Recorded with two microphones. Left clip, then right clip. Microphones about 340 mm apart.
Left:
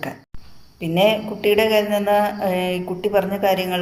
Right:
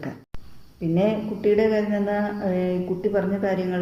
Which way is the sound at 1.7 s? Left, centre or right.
Left.